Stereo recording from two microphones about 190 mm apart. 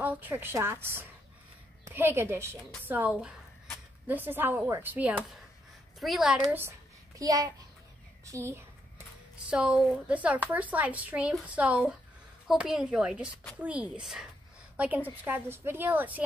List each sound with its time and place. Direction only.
0.0 s a woman's voice: 10° right (ahead or behind)
7.2 s a child's voice: 20° right (ahead or behind)